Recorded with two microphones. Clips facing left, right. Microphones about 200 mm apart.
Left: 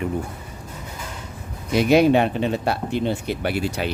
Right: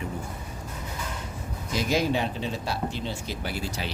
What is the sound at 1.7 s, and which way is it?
Speech, 65° left (ahead or behind).